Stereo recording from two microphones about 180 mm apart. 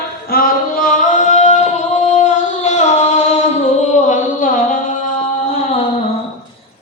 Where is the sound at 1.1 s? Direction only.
40° left (ahead or behind).